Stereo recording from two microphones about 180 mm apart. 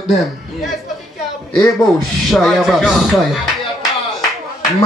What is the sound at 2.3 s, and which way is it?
Speech, centre (ahead or behind).